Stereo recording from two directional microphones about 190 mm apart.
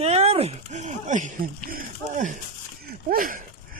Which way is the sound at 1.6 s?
45° right (ahead or behind).